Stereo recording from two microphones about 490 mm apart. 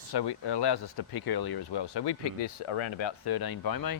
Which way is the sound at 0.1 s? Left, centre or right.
Left.